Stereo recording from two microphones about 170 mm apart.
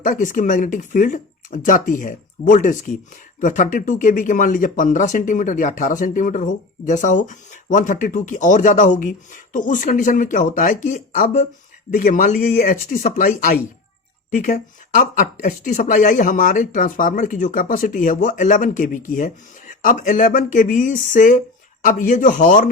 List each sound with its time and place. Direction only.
0.0 s speech: 50° left (ahead or behind)